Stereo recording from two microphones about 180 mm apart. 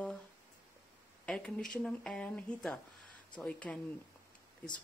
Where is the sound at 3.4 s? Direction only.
5° left (ahead or behind).